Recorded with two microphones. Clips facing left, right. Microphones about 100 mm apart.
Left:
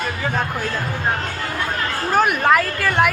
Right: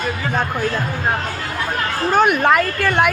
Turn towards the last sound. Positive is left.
turn(degrees=0)  # may be behind; listen again after turning